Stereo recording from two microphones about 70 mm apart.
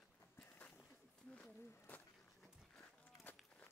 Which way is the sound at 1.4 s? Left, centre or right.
Left.